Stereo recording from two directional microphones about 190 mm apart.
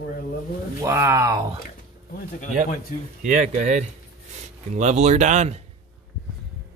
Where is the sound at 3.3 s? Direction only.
40° right (ahead or behind).